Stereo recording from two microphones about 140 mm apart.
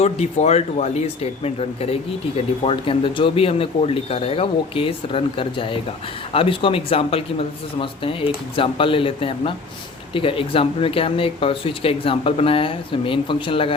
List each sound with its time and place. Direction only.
0.0 s speech: 50° left (ahead or behind)